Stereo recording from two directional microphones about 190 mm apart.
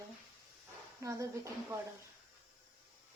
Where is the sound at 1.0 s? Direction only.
15° right (ahead or behind).